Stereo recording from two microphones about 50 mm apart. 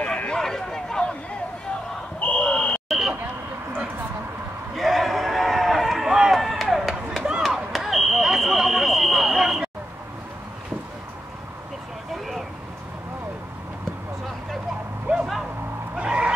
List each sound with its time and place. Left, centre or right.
0.3 s a sound: centre
2.1 s buzzer: left
2.9 s vehicle: centre
4.7 s run: centre
6.3 s chop: centre
7.4 s fire alarm: centre
12.1 s vehicle: centre
15.1 s a sound: right
16.0 s vehicle: right